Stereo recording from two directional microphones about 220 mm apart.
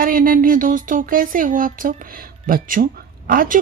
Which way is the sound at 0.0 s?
40° right (ahead or behind).